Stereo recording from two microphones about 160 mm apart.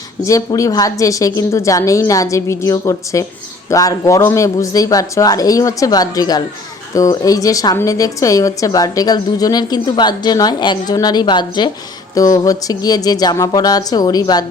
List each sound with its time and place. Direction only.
0.3 s a woman's voice: 20° left (ahead or behind)